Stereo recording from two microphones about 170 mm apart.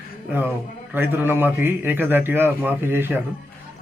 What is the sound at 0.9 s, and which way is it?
A man's voice, 10° right (ahead or behind).